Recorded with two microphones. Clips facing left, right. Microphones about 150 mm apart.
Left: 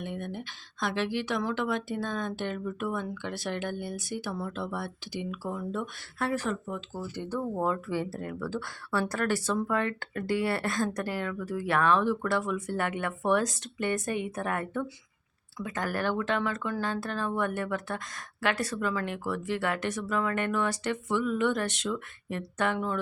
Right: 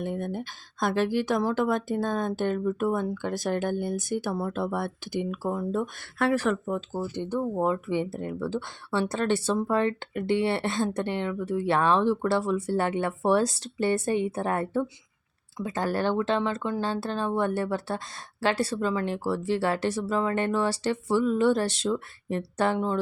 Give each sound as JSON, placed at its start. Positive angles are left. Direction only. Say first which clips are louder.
{"t": 0.0, "sound": "speech", "louder": "right 5 dB", "side_deg": -40}
{"t": 6.1, "sound": "speech", "louder": "right 6 dB", "side_deg": -90}
{"t": 6.7, "sound": "speech", "louder": "right 6 dB", "side_deg": -40}
{"t": 7.1, "sound": "speech", "louder": "right 2 dB", "side_deg": -20}